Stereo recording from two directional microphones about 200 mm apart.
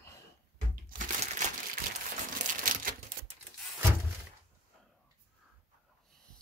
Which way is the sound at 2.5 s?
40° right (ahead or behind).